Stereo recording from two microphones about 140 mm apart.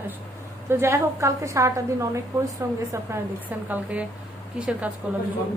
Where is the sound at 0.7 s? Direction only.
20° right (ahead or behind).